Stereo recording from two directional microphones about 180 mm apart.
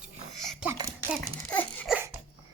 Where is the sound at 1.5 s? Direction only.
10° left (ahead or behind).